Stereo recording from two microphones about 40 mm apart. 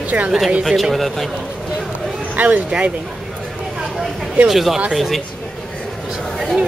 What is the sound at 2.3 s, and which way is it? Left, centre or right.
Speech, right.